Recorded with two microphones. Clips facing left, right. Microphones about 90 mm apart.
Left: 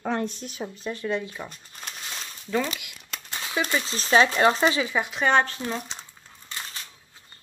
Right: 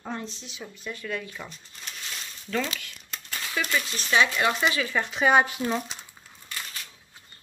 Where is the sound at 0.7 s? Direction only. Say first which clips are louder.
Left 5 dB; 35° left (ahead or behind).